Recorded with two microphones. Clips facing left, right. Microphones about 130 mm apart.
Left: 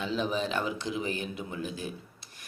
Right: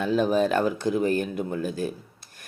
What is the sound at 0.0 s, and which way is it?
Speech, 50° right (ahead or behind).